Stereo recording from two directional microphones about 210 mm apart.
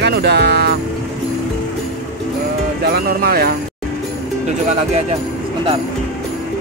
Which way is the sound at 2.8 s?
45° right (ahead or behind).